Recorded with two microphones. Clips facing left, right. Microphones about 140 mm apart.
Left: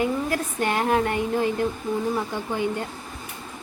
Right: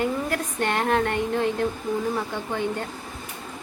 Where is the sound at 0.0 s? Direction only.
5° left (ahead or behind).